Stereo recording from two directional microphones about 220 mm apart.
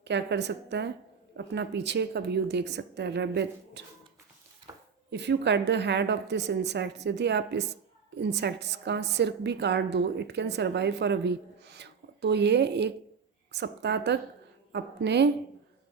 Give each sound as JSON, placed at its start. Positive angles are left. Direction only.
{"t": 0.0, "sound": "a woman's voice", "side_deg": -50}
{"t": 5.1, "sound": "a woman's voice", "side_deg": -50}